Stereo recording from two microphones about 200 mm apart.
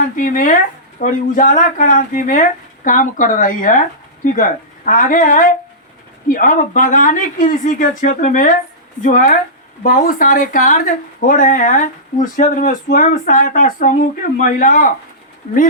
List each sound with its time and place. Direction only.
0.0 s speech: 40° left (ahead or behind)